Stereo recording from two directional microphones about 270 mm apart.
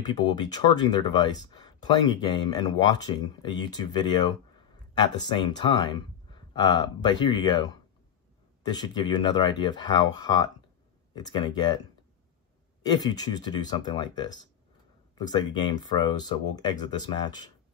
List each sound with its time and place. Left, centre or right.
0.0 s speech: centre
12.8 s speech: centre